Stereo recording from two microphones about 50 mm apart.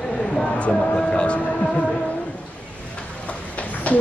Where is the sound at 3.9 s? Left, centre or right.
Left.